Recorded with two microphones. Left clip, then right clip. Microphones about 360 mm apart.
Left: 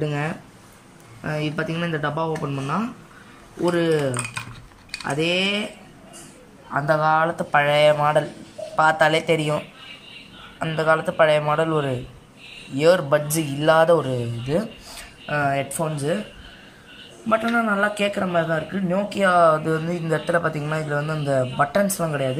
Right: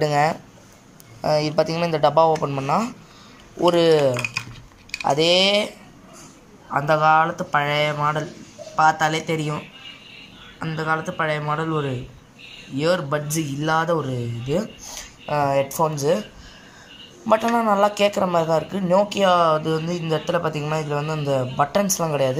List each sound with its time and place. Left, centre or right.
0.0 s a man's voice: centre
6.7 s a man's voice: centre
10.6 s a man's voice: centre
17.3 s a man's voice: centre